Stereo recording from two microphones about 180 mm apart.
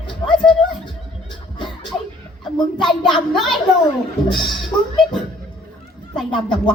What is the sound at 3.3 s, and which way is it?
Speech, centre (ahead or behind).